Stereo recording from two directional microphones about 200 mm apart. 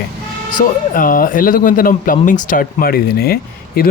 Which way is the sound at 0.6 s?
45° left (ahead or behind).